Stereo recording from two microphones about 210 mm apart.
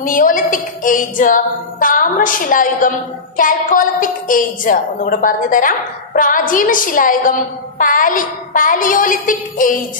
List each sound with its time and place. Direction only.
0.0 s a woman's voice: 40° left (ahead or behind)